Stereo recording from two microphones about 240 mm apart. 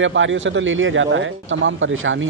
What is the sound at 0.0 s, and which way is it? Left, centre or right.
Speech, right.